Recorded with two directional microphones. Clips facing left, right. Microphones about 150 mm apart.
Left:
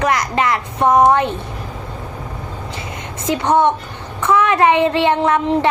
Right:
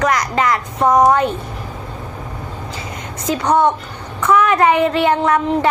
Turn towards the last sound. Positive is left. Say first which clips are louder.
# even
turn(degrees=25)  # may be behind; listen again after turning